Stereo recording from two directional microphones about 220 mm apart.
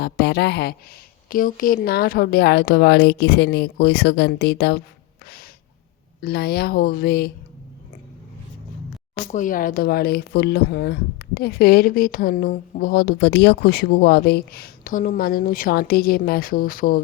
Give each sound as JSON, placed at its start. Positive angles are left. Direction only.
{"t": 0.0, "sound": "speech", "side_deg": 45}
{"t": 5.2, "sound": "gasp", "side_deg": 45}
{"t": 6.1, "sound": "speech", "side_deg": 45}
{"t": 9.3, "sound": "speech", "side_deg": 35}